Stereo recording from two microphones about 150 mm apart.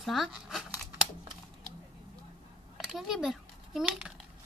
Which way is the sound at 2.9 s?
5° right (ahead or behind).